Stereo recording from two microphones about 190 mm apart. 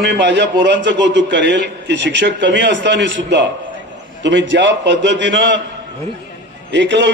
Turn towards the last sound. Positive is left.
turn(degrees=-70)  # may be behind; listen again after turning